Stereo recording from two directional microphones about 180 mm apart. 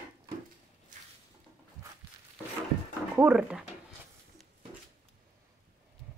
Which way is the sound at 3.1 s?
5° right (ahead or behind).